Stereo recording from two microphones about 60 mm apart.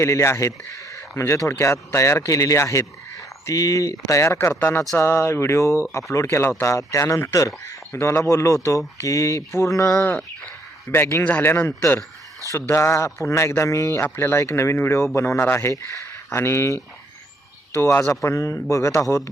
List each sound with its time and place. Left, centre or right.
0.0 s a man's voice: left
4.0 s speech: left
4.4 s speech: left
6.7 s speech: left
7.9 s speech: left
9.9 s speech: left
10.9 s speech: left
11.2 s speech: left
12.5 s speech: left
18.1 s speech: left